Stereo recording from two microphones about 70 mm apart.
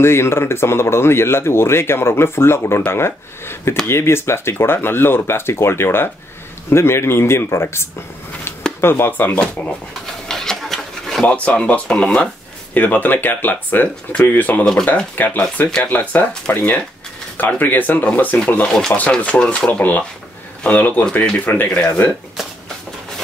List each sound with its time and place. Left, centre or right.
0.0 s speech: left
10.2 s a sound: centre
11.2 s speech: centre
14.6 s speech: centre
15.1 s speech: left
18.7 s speech: centre
18.9 s speech: centre